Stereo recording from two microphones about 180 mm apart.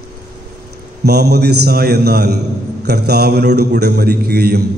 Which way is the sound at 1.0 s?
65° right (ahead or behind).